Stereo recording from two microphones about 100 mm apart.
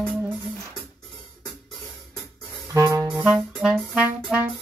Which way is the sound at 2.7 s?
35° right (ahead or behind).